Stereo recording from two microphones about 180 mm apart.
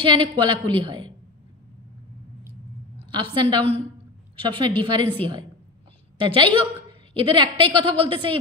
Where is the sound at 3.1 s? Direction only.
25° right (ahead or behind).